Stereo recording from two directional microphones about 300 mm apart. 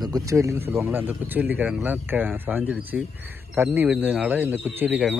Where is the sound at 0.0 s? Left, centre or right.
Centre.